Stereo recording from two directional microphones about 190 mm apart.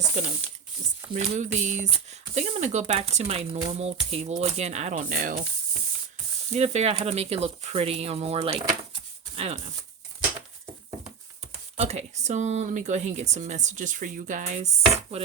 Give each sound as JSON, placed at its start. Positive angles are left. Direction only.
{"t": 1.1, "sound": "speech", "side_deg": -40}
{"t": 6.5, "sound": "speech", "side_deg": -35}
{"t": 11.8, "sound": "speech", "side_deg": -35}